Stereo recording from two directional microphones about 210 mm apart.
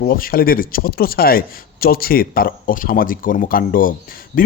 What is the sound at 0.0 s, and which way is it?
A man's voice, 45° left (ahead or behind).